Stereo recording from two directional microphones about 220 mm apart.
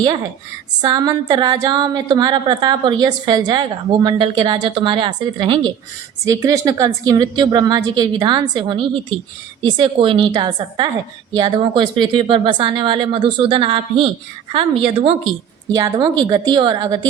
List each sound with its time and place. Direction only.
0.8 s a woman's voice: 15° right (ahead or behind)